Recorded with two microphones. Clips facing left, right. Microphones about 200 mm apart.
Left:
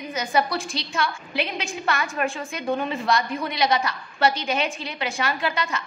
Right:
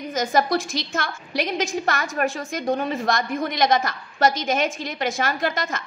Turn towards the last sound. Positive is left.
turn(degrees=-45)  # may be behind; listen again after turning